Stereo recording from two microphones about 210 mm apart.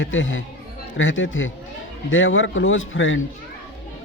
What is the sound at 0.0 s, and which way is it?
Speech, 65° left (ahead or behind).